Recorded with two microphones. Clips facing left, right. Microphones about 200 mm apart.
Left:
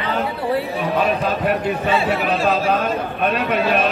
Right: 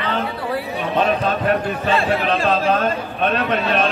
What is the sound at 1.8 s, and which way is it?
Speech, 5° left (ahead or behind).